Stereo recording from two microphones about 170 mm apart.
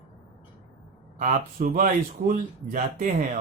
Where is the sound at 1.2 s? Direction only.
55° right (ahead or behind).